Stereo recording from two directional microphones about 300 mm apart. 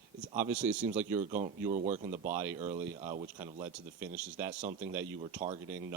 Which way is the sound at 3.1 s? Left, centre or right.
Right.